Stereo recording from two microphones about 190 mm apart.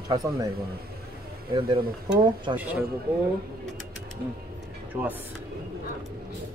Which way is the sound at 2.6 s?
10° right (ahead or behind).